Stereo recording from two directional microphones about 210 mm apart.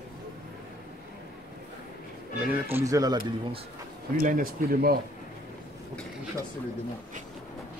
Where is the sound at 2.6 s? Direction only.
15° right (ahead or behind).